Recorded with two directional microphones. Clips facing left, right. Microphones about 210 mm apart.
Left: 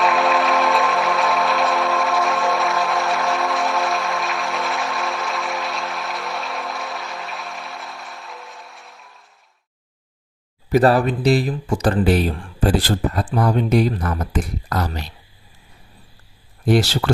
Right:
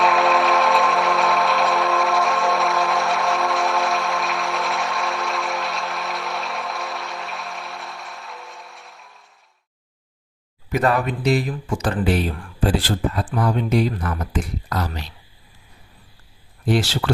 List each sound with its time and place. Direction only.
0.0 s music: centre (ahead or behind)
10.7 s speech: 35° left (ahead or behind)
16.6 s speech: 45° left (ahead or behind)